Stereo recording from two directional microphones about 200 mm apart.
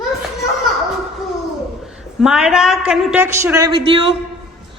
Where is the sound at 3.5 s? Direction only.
20° right (ahead or behind).